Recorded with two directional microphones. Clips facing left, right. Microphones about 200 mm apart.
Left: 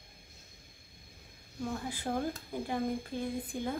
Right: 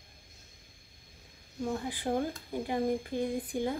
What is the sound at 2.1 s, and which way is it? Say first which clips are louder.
Speech: right 4 dB; 15° right (ahead or behind).